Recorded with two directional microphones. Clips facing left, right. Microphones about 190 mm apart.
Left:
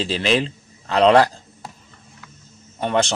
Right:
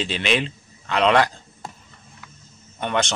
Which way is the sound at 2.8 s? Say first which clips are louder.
Left 4 dB; 30° left (ahead or behind).